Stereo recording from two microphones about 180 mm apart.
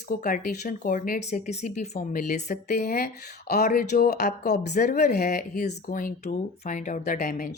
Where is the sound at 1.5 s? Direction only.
40° left (ahead or behind).